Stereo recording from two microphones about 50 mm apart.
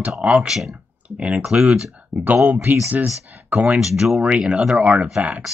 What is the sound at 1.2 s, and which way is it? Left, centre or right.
Speech, right.